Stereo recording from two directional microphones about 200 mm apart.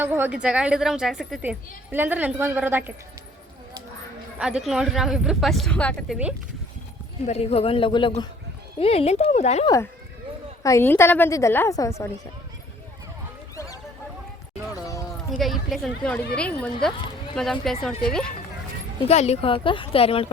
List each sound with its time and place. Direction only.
0.0 s a woman's voice: 10° right (ahead or behind)
4.4 s speech: 5° right (ahead or behind)
7.3 s speech: 30° left (ahead or behind)
9.6 s a woman's voice: 15° left (ahead or behind)
14.7 s a sound: 15° left (ahead or behind)
15.4 s speech: centre (ahead or behind)
19.0 s speech: 30° left (ahead or behind)